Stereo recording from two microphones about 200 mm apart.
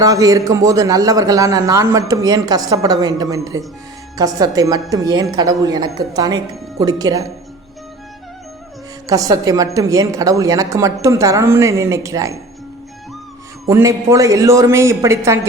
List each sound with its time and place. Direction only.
0.0 s a man's voice: 15° right (ahead or behind)
9.0 s a man's voice: 15° right (ahead or behind)
13.7 s a man's voice: 15° right (ahead or behind)